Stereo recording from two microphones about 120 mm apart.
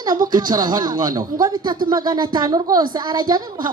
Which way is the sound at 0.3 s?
35° right (ahead or behind).